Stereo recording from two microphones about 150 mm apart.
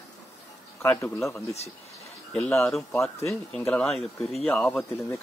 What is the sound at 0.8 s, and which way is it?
Speech, 15° left (ahead or behind).